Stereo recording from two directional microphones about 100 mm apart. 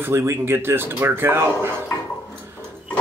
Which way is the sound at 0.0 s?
25° right (ahead or behind).